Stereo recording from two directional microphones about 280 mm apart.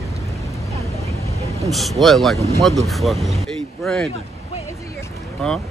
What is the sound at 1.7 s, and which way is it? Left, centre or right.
Speech, centre.